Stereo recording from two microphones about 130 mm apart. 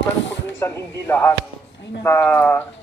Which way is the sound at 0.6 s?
15° left (ahead or behind).